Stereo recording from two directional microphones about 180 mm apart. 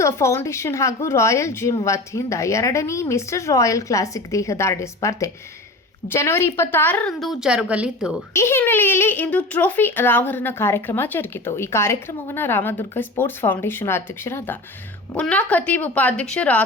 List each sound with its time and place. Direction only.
0.0 s a child's voice: 15° left (ahead or behind); by 8.1 s 5° right (ahead or behind)
8.3 s a child's voice: 15° left (ahead or behind)